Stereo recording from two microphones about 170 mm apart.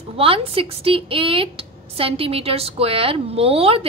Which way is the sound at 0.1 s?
35° right (ahead or behind).